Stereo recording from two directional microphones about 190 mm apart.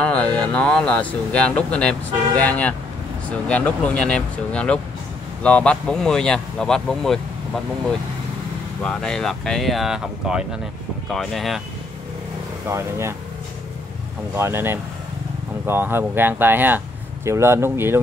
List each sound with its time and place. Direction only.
0.0 s speech: 5° left (ahead or behind)
8.8 s speech: 5° left (ahead or behind)
12.6 s speech: 15° right (ahead or behind)
14.3 s speech: 10° right (ahead or behind)